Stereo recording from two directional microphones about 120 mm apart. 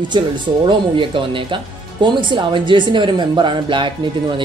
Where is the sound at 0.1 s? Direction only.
35° right (ahead or behind).